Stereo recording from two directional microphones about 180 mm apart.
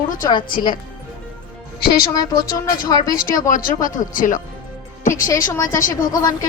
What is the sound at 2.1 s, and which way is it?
Speech, 20° left (ahead or behind).